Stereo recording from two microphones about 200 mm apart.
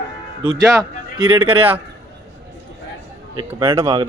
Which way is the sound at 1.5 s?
10° right (ahead or behind).